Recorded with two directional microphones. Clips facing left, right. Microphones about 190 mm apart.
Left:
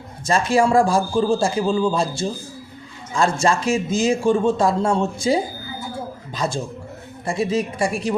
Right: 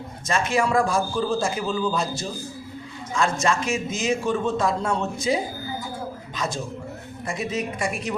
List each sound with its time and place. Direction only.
0.3 s speech: 35° left (ahead or behind)